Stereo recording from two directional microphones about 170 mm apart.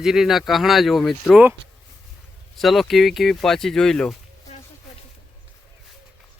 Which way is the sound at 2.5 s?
Centre (ahead or behind).